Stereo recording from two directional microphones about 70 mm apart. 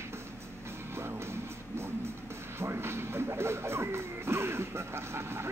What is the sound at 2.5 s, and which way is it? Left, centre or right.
Music, right.